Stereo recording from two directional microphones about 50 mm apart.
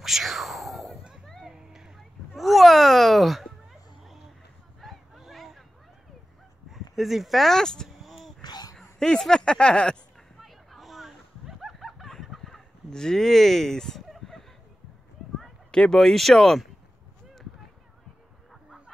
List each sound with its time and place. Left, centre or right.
0.0 s a sound: centre
1.4 s music: centre
2.3 s speech: centre
4.8 s a sound: centre
6.7 s speech: centre
8.0 s wail: centre
8.7 s speech: centre
10.4 s a sound: centre
15.7 s speech: centre